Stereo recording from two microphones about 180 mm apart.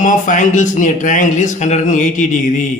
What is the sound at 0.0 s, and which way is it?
Speech, 45° left (ahead or behind).